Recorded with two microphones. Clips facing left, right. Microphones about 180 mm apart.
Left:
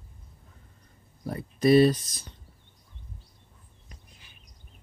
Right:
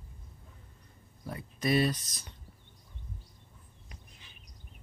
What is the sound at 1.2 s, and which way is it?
Speech, 35° left (ahead or behind).